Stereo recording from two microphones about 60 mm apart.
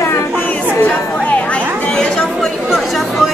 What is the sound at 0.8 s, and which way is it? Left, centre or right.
Speech, left.